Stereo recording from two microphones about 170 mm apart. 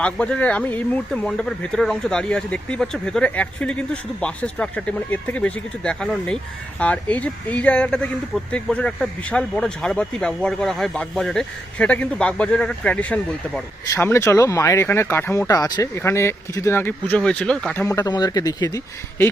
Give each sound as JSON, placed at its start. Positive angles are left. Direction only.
{"t": 0.0, "sound": "speech", "side_deg": 5}
{"t": 17.7, "sound": "speech", "side_deg": 20}